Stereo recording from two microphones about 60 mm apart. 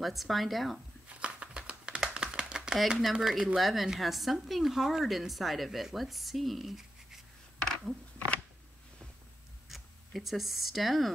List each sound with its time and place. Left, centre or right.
0.0 s a woman's voice: centre
1.0 s a sound: centre
2.9 s a woman's voice: centre
9.7 s speech: centre